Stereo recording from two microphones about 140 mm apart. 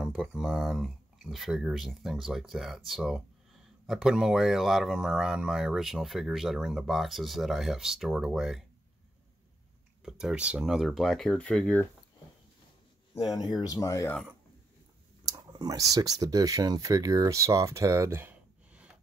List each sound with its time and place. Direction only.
0.0 s speech: 5° right (ahead or behind)
10.0 s speech: 5° right (ahead or behind)
13.6 s speech: 25° left (ahead or behind)
15.2 s speech: 25° right (ahead or behind); by 18.9 s 10° right (ahead or behind)